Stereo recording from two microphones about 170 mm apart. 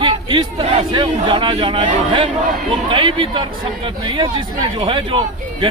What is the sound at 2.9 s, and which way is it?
Speech, 30° right (ahead or behind).